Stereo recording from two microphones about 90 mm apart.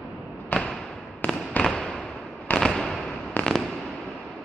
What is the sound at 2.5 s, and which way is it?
Fireworks, 5° left (ahead or behind).